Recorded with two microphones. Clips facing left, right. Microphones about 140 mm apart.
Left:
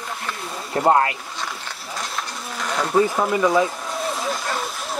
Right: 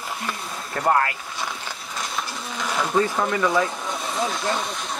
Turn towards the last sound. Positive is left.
turn(degrees=5)  # may be behind; listen again after turning